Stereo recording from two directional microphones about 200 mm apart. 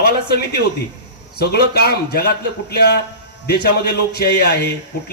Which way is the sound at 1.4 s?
55° left (ahead or behind).